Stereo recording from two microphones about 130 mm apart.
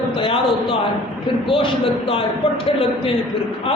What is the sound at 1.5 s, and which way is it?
A man's voice, 45° left (ahead or behind).